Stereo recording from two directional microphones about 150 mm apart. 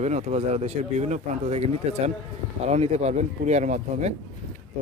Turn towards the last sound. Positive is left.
turn(degrees=-55)  # may be behind; listen again after turning